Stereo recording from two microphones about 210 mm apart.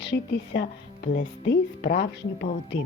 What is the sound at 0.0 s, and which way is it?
Speech, 55° left (ahead or behind).